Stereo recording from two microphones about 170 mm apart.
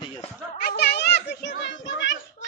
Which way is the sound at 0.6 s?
80° left.